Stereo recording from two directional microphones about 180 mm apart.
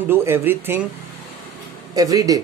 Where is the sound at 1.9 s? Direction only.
20° right (ahead or behind).